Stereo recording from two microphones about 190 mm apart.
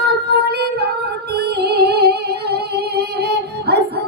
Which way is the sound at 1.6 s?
60° right (ahead or behind).